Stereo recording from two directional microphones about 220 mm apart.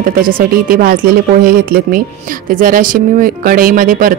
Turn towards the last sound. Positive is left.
turn(degrees=-40)  # may be behind; listen again after turning